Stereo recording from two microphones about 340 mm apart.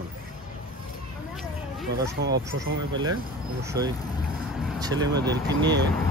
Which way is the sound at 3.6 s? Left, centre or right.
Centre.